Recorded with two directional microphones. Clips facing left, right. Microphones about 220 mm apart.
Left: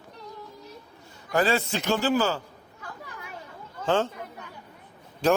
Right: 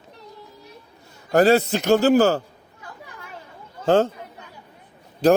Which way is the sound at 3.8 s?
40° right (ahead or behind).